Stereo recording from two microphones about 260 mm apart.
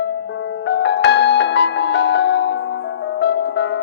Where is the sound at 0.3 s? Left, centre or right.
Left.